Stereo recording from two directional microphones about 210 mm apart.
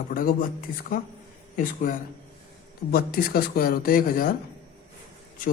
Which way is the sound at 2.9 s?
45° left (ahead or behind).